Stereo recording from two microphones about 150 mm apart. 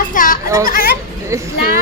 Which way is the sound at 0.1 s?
65° left (ahead or behind).